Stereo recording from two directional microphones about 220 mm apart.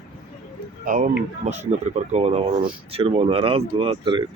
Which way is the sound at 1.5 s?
30° right (ahead or behind).